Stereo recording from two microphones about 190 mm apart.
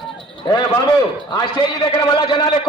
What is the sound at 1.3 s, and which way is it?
A man's voice, 25° left (ahead or behind).